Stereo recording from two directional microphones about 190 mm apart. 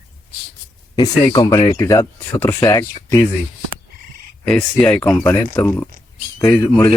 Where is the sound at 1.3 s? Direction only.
20° left (ahead or behind).